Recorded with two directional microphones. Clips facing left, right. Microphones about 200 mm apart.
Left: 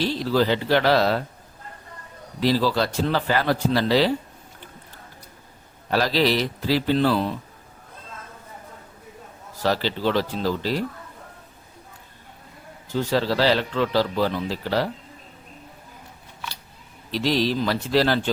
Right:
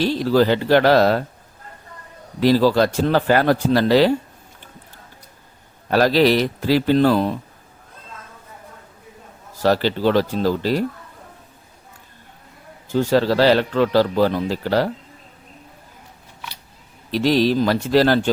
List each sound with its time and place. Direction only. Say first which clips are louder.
0.0 s speech: right 5 dB; 45° right (ahead or behind)
2.4 s speech: right 6 dB; 50° right (ahead or behind)
5.9 s speech: right 6 dB; 50° right (ahead or behind)
9.6 s speech: right 5 dB; 45° right (ahead or behind)
12.9 s speech: right 5 dB; 50° right (ahead or behind)
17.1 s speech: right 5 dB; 50° right (ahead or behind)